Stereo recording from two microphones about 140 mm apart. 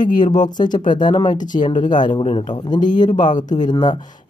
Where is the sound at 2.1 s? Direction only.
40° left (ahead or behind).